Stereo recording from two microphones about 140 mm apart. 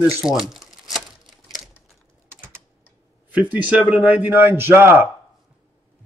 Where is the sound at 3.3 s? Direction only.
10° right (ahead or behind).